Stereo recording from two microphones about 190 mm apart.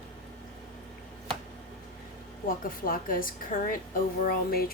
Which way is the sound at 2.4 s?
50° left (ahead or behind).